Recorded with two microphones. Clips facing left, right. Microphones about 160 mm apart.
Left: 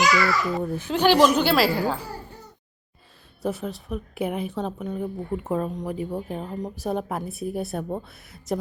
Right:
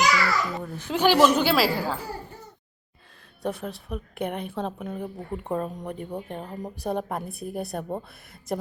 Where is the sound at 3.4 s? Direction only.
Centre (ahead or behind).